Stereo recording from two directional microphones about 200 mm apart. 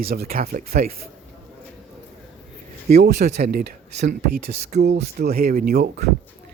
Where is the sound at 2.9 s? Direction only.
55° right (ahead or behind).